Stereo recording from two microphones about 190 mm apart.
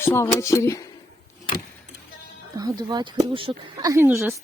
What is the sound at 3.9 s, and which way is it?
Speech, 15° right (ahead or behind).